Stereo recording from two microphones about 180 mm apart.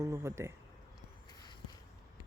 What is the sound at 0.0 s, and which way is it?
Speech, 15° right (ahead or behind).